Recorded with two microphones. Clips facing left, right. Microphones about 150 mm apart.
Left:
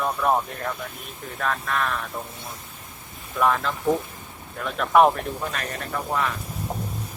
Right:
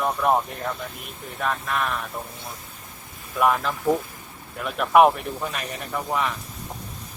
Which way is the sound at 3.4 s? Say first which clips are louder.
Right 1 dB; 10° right (ahead or behind).